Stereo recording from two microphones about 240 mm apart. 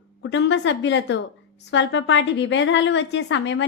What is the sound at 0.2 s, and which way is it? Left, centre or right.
A woman's voice, left.